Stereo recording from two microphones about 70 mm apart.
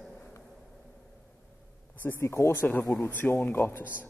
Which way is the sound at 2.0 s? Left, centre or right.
Left.